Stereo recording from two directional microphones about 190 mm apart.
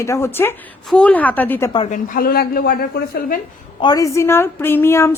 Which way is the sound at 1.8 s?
45° left (ahead or behind).